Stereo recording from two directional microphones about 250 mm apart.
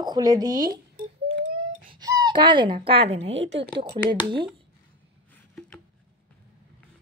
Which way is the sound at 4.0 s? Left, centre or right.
Right.